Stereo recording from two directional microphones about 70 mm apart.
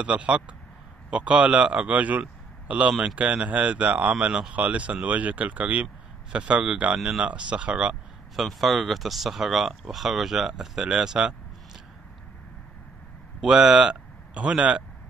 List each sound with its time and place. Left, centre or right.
0.0 s speech: centre
8.4 s a man's voice: centre
13.4 s speech: centre